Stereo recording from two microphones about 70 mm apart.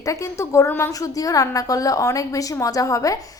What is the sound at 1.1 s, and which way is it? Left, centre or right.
A woman's voice, left.